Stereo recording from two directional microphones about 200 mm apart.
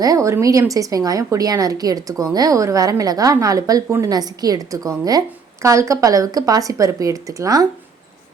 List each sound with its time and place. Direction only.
0.0 s a woman's voice: 15° right (ahead or behind)